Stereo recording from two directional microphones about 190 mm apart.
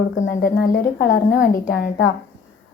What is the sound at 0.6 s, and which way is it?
A woman's voice, 50° left (ahead or behind).